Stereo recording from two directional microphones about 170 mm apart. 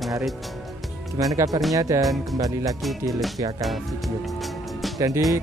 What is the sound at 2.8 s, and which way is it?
Speech, centre (ahead or behind).